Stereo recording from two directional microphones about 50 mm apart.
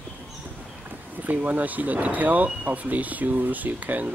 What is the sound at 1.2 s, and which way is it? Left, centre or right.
Speech, right.